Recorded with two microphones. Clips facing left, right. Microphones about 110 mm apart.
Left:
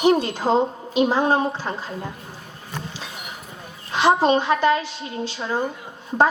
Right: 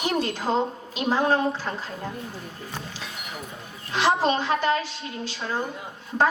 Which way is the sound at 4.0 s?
20° left (ahead or behind).